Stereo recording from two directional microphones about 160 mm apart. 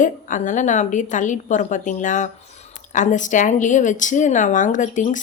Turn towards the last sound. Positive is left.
turn(degrees=50)  # may be behind; listen again after turning